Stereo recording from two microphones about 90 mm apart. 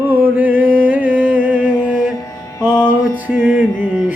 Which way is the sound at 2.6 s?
45° left (ahead or behind).